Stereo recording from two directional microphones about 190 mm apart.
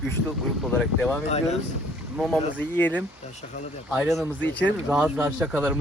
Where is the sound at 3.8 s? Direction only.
5° right (ahead or behind).